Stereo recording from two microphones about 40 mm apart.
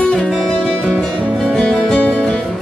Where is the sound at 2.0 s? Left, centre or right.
Left.